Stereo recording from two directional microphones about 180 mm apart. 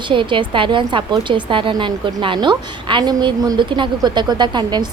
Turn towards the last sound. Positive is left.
turn(degrees=-25)  # may be behind; listen again after turning